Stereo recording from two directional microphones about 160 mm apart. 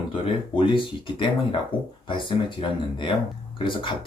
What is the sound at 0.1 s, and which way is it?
Speech, 30° left (ahead or behind).